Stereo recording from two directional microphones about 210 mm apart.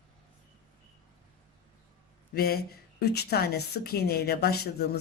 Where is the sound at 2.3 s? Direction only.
45° left (ahead or behind).